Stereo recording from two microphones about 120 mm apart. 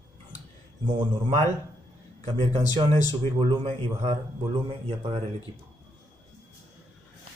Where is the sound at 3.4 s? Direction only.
40° right (ahead or behind).